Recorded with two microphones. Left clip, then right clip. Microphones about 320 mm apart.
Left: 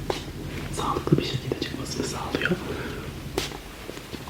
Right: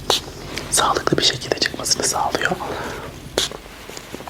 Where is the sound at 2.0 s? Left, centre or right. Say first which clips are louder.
Right 6 dB; right.